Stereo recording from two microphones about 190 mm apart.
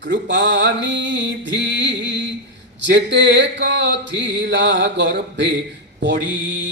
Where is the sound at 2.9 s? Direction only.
70° right (ahead or behind).